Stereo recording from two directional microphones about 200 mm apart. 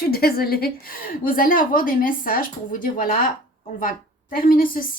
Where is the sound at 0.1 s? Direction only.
50° left (ahead or behind).